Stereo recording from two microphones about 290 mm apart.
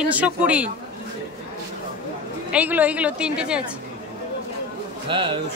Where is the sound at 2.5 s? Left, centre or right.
Centre.